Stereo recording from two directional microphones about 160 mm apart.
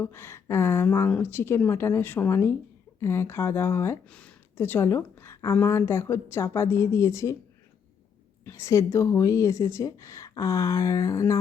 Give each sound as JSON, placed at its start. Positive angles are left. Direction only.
{"t": 0.0, "sound": "speech", "side_deg": 15}
{"t": 8.4, "sound": "speech", "side_deg": 20}